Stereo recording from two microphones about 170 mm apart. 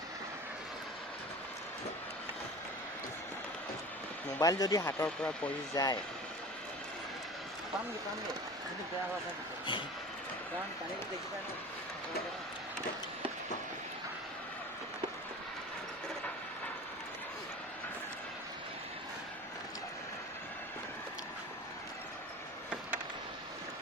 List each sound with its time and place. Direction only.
4.4 s speech: 20° left (ahead or behind)
5.7 s speech: 20° left (ahead or behind)